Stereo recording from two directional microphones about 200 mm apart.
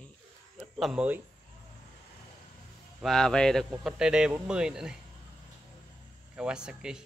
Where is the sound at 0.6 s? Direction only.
Centre (ahead or behind).